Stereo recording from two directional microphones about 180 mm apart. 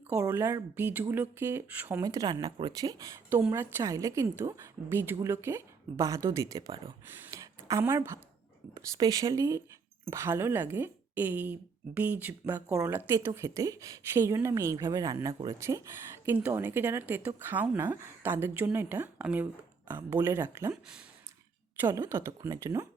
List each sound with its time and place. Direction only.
0.1 s speech: 10° right (ahead or behind)
7.3 s a sound: 15° right (ahead or behind)
8.7 s speech: 20° right (ahead or behind)